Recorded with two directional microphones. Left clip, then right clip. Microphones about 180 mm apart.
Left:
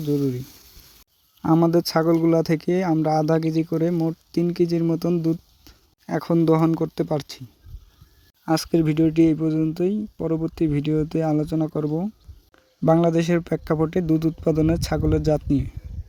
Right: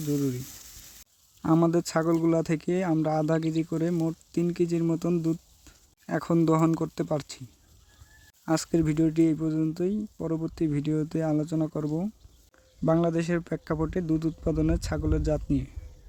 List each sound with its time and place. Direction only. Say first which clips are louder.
0.1 s speech: left 6 dB; 10° left (ahead or behind)
8.4 s speech: left 5 dB; 10° left (ahead or behind)
12.8 s a man's voice: left 7 dB; 20° left (ahead or behind)